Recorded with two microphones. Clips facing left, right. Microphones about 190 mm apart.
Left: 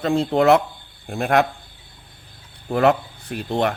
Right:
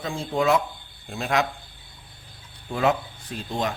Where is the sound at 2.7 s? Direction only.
60° left (ahead or behind).